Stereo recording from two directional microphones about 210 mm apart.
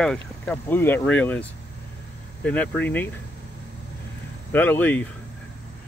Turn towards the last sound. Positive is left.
turn(degrees=10)  # may be behind; listen again after turning